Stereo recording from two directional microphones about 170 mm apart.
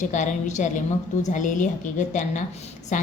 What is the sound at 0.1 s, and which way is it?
A woman's voice, 45° left (ahead or behind).